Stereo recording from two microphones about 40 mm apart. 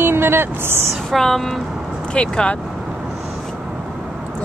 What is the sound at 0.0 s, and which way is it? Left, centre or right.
Speech, right.